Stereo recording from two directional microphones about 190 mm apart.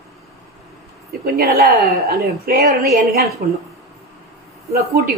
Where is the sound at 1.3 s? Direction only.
55° right (ahead or behind).